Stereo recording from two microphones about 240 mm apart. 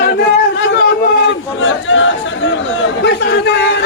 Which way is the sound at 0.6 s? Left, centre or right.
Left.